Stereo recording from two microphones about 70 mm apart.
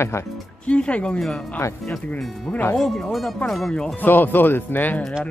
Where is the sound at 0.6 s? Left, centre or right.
Centre.